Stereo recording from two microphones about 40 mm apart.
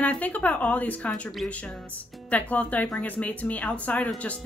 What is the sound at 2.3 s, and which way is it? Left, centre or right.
A woman's voice, left.